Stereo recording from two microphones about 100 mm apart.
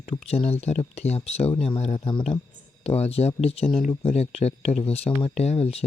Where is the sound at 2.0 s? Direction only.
55° left (ahead or behind).